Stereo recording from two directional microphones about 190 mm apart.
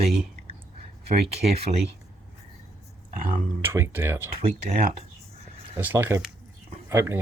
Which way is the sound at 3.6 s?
10° right (ahead or behind).